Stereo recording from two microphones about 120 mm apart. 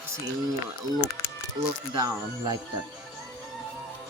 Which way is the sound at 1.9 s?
35° right (ahead or behind).